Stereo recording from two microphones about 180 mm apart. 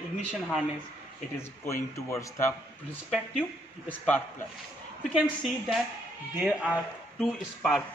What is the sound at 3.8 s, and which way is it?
Speech, 10° left (ahead or behind).